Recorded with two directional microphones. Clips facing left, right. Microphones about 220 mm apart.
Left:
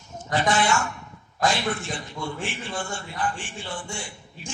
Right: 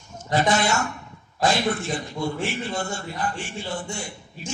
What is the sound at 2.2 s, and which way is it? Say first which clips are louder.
A man's voice: right 5 dB; 40° right (ahead or behind).